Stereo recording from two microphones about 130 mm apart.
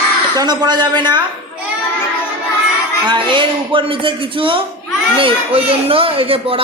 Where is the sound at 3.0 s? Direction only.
40° right (ahead or behind).